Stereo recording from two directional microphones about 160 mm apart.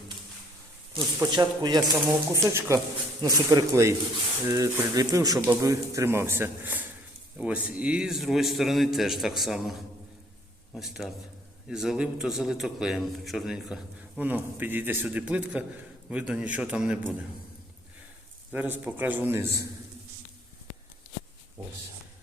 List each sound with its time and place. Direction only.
0.9 s a man's voice: 25° right (ahead or behind); by 9.7 s centre (ahead or behind)
10.8 s a man's voice: centre (ahead or behind)
18.5 s a man's voice: 10° right (ahead or behind)